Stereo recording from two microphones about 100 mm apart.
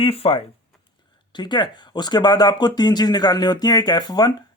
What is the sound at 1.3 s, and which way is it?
Speech, 50° left (ahead or behind).